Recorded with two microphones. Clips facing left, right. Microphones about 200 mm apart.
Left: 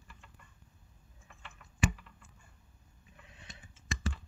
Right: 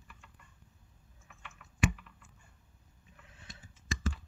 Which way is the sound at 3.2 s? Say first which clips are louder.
Even; 20° left (ahead or behind).